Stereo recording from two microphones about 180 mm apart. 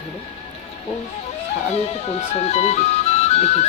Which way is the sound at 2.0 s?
35° left (ahead or behind).